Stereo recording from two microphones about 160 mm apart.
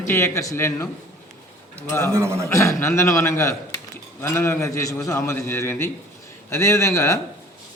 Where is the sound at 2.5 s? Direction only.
20° left (ahead or behind).